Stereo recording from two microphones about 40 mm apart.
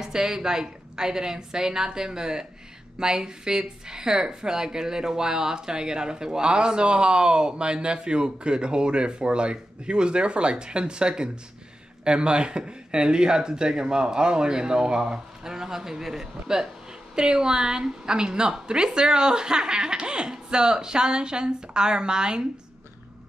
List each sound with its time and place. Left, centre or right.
0.0 s a woman's voice: centre